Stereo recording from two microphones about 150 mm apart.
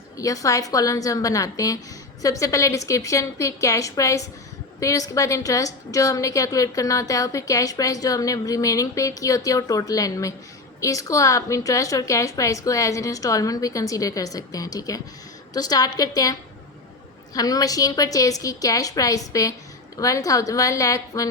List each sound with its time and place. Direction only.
0.2 s a woman's voice: 20° left (ahead or behind)